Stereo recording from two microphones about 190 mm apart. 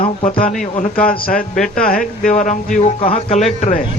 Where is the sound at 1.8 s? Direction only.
45° left (ahead or behind).